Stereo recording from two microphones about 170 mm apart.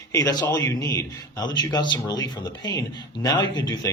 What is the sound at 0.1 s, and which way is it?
Speech, 20° left (ahead or behind).